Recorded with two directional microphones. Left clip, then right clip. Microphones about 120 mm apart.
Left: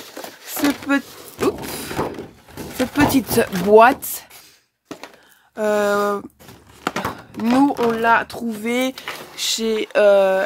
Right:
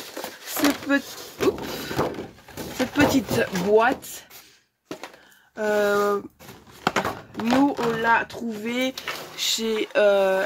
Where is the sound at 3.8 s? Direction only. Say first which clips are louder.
Left 12 dB; 75° left (ahead or behind).